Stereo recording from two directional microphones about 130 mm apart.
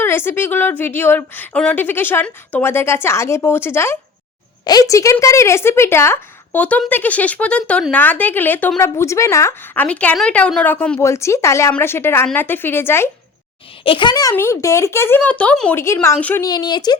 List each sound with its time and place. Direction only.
0.0 s a woman's voice: 20° left (ahead or behind)
9.8 s a woman's voice: 10° left (ahead or behind)
11.0 s a woman's voice: 20° left (ahead or behind)
13.8 s a woman's voice: 40° left (ahead or behind); by 15.7 s 10° left (ahead or behind)
15.7 s a woman's voice: 20° left (ahead or behind)
16.4 s speech: 30° left (ahead or behind)